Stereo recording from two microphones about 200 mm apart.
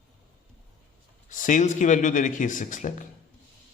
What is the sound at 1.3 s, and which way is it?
Speech, 40° left (ahead or behind).